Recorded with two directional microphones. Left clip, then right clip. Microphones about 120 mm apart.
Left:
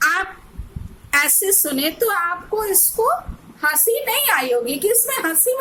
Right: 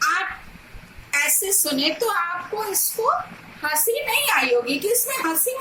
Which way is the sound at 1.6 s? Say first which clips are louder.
Right 2 dB; 25° left (ahead or behind).